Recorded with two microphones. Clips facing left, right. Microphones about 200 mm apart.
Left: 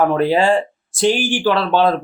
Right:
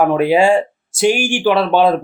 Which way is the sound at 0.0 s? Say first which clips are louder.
Right 2 dB; 10° right (ahead or behind).